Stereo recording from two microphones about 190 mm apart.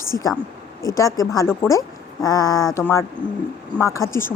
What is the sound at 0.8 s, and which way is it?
A woman's voice, 15° left (ahead or behind).